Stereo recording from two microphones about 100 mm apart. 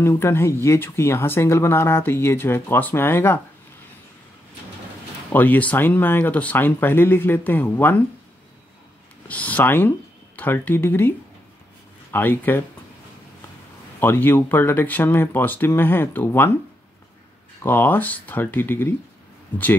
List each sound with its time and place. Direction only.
0.0 s speech: 25° left (ahead or behind)
5.3 s speech: 20° left (ahead or behind)
9.3 s speech: 15° left (ahead or behind)
13.9 s speech: 20° left (ahead or behind)
17.6 s speech: 20° left (ahead or behind)